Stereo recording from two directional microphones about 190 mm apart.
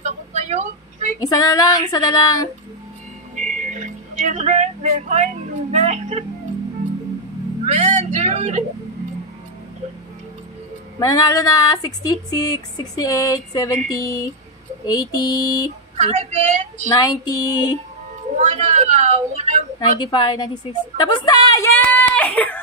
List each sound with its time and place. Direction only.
0.0 s a sound: 35° right (ahead or behind)
1.2 s speech: 20° left (ahead or behind)
3.3 s music: 40° right (ahead or behind)
7.6 s speech: 40° right (ahead or behind)
11.0 s speech: 20° left (ahead or behind)
16.0 s speech: 35° right (ahead or behind)
16.9 s speech: 20° left (ahead or behind)
18.3 s a sound: 40° right (ahead or behind)
19.8 s speech: 20° left (ahead or behind)
21.8 s speech: 10° left (ahead or behind)